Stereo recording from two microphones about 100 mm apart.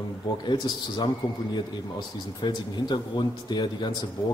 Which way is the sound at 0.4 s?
50° left (ahead or behind).